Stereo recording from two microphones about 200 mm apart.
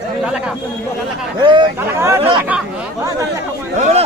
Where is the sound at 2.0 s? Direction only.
10° right (ahead or behind).